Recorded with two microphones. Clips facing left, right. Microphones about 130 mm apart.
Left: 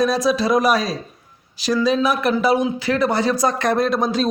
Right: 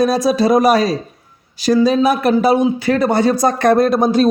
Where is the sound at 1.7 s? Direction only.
45° right (ahead or behind).